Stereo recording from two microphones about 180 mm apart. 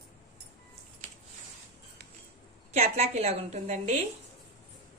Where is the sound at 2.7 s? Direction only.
35° right (ahead or behind).